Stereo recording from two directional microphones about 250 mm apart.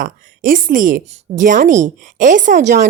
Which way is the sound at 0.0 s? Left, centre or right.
Right.